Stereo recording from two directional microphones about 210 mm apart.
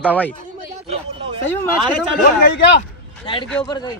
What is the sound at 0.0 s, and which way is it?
Speech, 5° left (ahead or behind).